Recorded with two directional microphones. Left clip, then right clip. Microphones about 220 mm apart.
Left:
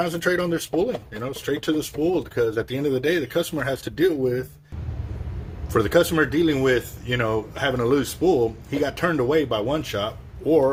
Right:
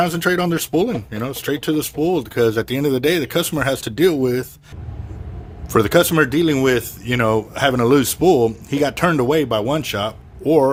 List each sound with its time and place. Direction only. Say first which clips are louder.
0.0 s speech: right 5 dB; 45° right (ahead or behind)
5.7 s speech: right 4 dB; 45° right (ahead or behind)